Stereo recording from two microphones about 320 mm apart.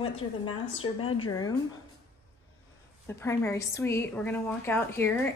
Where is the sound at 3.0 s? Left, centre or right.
Centre.